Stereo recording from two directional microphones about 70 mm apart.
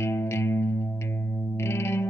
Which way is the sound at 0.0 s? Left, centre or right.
Left.